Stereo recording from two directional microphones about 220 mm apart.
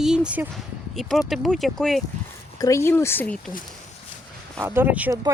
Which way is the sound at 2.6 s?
15° left (ahead or behind).